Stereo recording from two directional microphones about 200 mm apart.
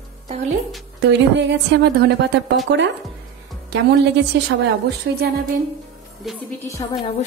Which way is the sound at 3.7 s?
60° right (ahead or behind).